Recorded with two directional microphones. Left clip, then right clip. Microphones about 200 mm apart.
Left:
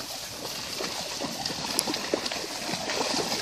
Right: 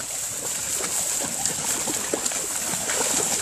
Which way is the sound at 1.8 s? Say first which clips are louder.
Right 1 dB; 10° right (ahead or behind).